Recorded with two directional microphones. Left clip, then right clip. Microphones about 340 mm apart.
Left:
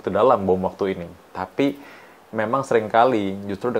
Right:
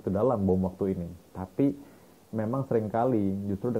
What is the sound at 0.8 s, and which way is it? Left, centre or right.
Speech, centre.